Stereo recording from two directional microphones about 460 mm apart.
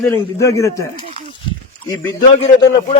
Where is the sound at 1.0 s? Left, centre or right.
Centre.